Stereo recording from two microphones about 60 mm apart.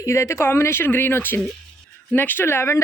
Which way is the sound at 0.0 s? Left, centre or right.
Left.